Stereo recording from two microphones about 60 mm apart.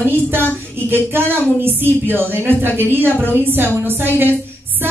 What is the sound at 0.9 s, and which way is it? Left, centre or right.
A woman's voice, right.